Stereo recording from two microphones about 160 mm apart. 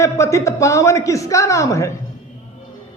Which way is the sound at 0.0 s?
20° left (ahead or behind).